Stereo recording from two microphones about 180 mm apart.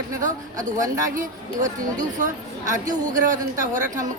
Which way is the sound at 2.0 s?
45° right (ahead or behind).